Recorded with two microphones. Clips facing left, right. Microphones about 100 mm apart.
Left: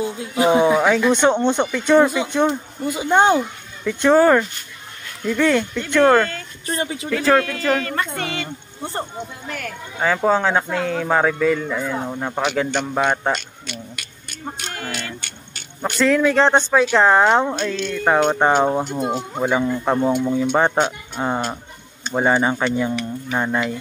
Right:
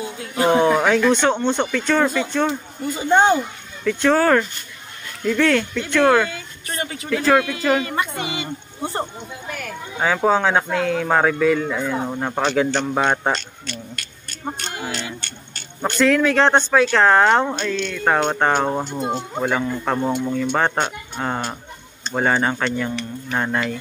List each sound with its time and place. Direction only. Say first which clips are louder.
0.4 s speech: left 1 dB; 10° left (ahead or behind)
6.6 s speech: left 4 dB; 30° left (ahead or behind)
7.1 s speech: even; 5° right (ahead or behind)
9.5 s speech: even; 5° right (ahead or behind)
15.1 s speech: right 1 dB; 5° left (ahead or behind)